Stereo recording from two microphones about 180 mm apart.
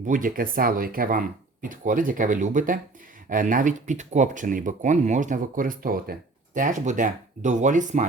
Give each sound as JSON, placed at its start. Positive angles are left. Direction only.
{"t": 0.0, "sound": "speech", "side_deg": -50}